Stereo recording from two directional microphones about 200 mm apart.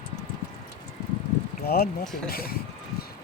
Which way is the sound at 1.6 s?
50° left (ahead or behind).